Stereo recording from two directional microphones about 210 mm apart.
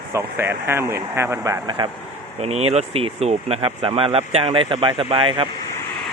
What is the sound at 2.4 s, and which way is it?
Speech, 30° right (ahead or behind).